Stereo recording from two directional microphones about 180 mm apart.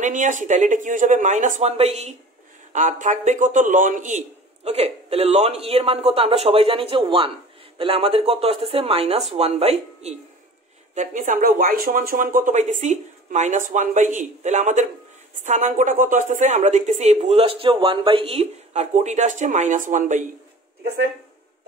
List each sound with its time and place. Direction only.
0.0 s speech: 45° right (ahead or behind)
4.6 s a man's voice: 35° right (ahead or behind)
11.0 s a man's voice: 45° right (ahead or behind)